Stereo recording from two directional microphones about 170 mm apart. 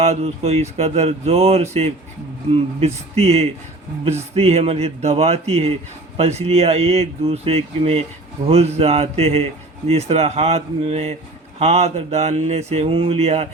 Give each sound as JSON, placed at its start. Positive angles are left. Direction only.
{"t": 0.0, "sound": "a man's voice", "side_deg": -40}